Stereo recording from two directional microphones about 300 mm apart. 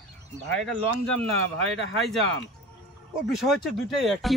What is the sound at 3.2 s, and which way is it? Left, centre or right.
Speech, centre.